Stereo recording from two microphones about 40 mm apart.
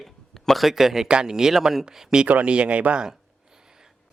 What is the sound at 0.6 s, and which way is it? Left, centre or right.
Speech, centre.